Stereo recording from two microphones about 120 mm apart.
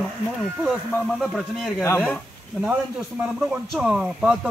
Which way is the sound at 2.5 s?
10° right (ahead or behind).